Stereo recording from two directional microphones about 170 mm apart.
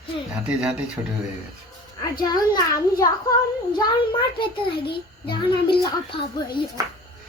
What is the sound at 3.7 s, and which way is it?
Speech, 25° left (ahead or behind).